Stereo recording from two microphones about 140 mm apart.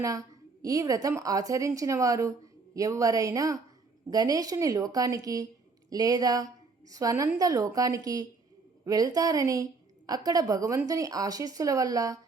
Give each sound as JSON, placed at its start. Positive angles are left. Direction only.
{"t": 0.0, "sound": "a woman's voice", "side_deg": -25}